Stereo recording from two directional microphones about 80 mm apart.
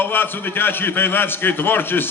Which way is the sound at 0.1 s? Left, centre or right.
Left.